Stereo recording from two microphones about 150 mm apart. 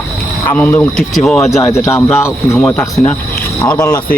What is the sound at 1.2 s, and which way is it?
Speech, 5° left (ahead or behind).